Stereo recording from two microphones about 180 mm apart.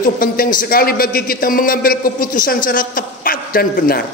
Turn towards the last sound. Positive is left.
turn(degrees=55)  # may be behind; listen again after turning